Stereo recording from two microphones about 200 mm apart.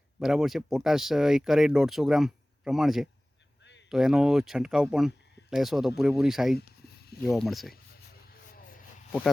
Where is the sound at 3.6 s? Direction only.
60° left (ahead or behind).